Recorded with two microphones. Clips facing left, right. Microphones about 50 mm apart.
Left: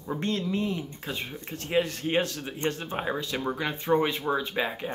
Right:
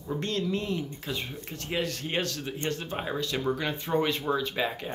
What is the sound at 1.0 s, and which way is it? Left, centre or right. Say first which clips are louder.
Speech: even; left.